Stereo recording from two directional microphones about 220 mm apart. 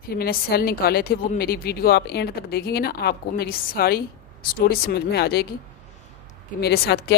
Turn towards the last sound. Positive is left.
turn(degrees=50)  # may be behind; listen again after turning